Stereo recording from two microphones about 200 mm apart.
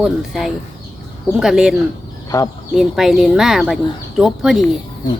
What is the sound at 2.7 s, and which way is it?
Speech, centre (ahead or behind).